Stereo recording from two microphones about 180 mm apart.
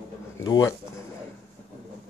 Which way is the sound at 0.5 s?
20° left (ahead or behind).